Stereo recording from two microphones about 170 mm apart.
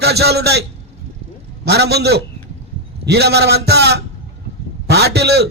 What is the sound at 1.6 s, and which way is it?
A man's voice, 75° right (ahead or behind).